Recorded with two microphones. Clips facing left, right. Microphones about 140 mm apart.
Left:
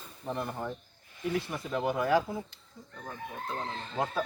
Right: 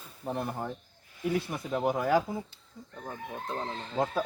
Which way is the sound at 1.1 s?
15° right (ahead or behind).